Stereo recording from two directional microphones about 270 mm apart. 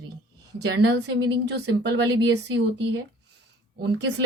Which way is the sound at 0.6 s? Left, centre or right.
Right.